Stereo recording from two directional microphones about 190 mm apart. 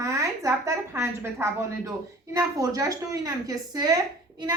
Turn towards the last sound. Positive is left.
turn(degrees=-20)  # may be behind; listen again after turning